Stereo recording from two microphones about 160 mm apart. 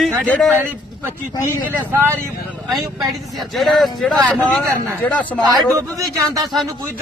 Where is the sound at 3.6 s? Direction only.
Centre (ahead or behind).